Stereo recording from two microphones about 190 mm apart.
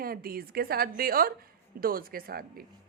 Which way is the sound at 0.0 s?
50° right (ahead or behind).